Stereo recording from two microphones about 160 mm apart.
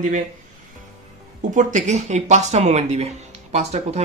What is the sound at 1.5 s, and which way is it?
Speech, 50° right (ahead or behind).